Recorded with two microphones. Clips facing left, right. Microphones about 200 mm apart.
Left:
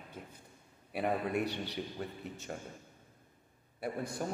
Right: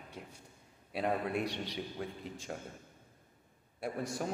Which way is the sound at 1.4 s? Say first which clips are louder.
Left 1 dB; 80° right.